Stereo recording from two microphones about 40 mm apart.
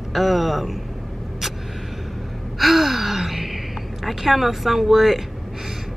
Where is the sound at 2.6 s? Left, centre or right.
Centre.